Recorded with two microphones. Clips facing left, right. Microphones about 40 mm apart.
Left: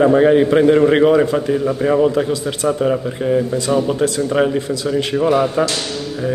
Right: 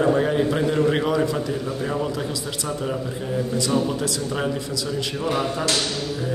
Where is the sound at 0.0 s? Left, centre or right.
Left.